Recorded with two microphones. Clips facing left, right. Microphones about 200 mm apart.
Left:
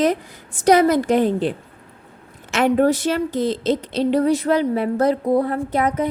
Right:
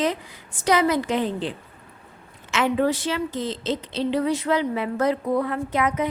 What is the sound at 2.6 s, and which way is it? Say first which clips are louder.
Speech: left 5 dB; 50° left (ahead or behind).